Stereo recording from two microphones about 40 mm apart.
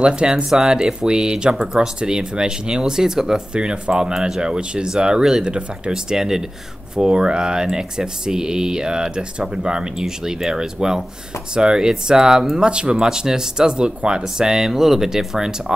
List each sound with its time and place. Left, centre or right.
0.0 s speech: right